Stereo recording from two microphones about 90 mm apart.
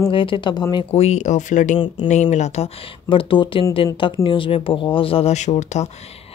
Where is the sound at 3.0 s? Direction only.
65° left (ahead or behind); by 5.2 s 80° left.